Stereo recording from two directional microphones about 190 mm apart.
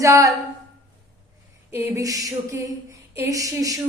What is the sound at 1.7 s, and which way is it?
A woman's voice, 10° right (ahead or behind).